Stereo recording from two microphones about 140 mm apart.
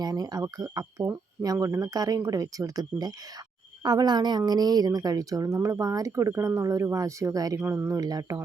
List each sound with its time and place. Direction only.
0.0 s a woman's voice: 30° right (ahead or behind)